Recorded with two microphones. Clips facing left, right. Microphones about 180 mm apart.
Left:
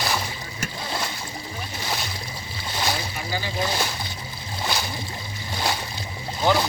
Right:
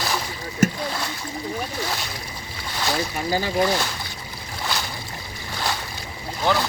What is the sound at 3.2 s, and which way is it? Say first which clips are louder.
Speech: right 6 dB; 45° right (ahead or behind).